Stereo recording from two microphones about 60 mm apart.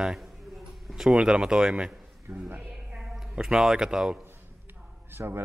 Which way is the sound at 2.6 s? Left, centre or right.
Centre.